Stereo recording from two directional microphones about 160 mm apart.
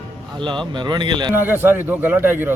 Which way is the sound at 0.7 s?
30° right (ahead or behind).